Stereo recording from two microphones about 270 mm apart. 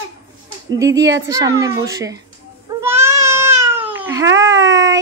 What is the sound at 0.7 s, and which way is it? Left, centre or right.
A child's voice, centre.